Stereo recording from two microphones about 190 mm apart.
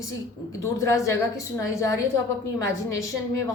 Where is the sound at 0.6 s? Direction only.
15° left (ahead or behind).